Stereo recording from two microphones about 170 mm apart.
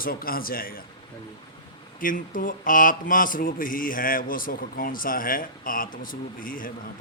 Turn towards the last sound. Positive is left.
turn(degrees=55)  # may be behind; listen again after turning